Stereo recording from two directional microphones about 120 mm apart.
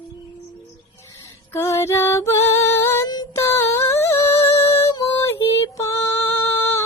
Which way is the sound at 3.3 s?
20° left (ahead or behind).